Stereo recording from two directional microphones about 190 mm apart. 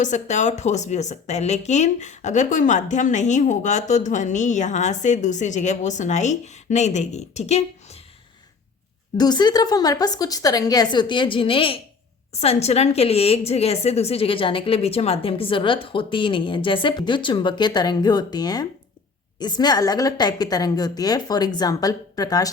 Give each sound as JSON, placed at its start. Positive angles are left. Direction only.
{"t": 0.0, "sound": "a woman's voice", "side_deg": 40}
{"t": 9.1, "sound": "a woman's voice", "side_deg": 20}